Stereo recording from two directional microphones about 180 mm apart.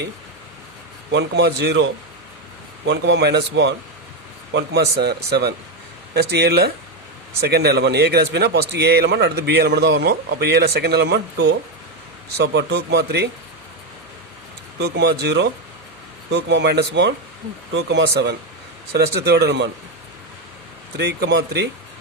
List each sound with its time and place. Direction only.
1.1 s a man's voice: 65° right (ahead or behind)
14.8 s a man's voice: 70° right (ahead or behind)
20.9 s a man's voice: 65° right (ahead or behind)